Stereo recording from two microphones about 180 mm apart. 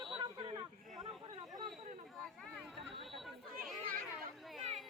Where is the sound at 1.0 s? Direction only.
20° right (ahead or behind).